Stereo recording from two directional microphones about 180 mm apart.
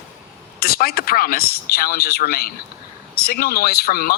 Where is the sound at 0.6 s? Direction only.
55° left (ahead or behind).